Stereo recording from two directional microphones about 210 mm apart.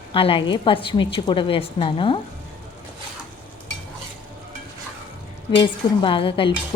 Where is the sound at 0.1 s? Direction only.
25° left (ahead or behind).